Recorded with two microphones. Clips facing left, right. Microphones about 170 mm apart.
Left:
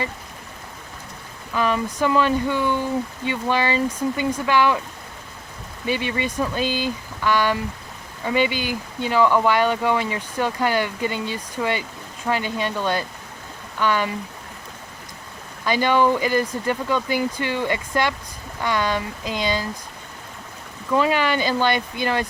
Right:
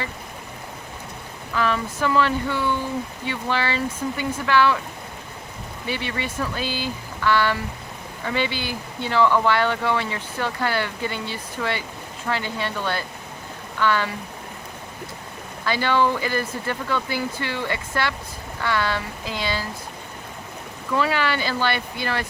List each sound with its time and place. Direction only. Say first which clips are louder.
1.5 s speech: left 2 dB; 15° left (ahead or behind)
5.9 s speech: left 4 dB; 15° left (ahead or behind)
15.6 s speech: left 3 dB; 15° left (ahead or behind)
20.9 s speech: left 3 dB; 15° left (ahead or behind)